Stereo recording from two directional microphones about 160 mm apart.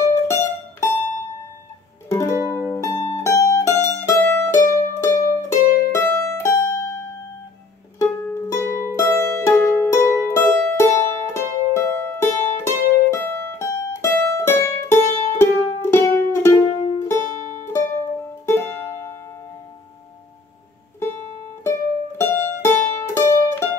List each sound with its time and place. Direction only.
0.1 s mandolin: 15° left (ahead or behind)
2.0 s music: 15° left (ahead or behind)
3.2 s mandolin: 20° left (ahead or behind)
4.5 s music: 20° left (ahead or behind)
21.6 s music: 15° left (ahead or behind)